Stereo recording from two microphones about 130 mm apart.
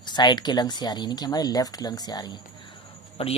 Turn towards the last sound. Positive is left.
turn(degrees=45)  # may be behind; listen again after turning